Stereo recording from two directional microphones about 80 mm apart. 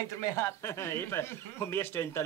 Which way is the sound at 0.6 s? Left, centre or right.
Left.